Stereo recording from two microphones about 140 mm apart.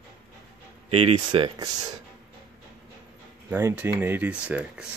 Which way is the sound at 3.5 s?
15° right (ahead or behind).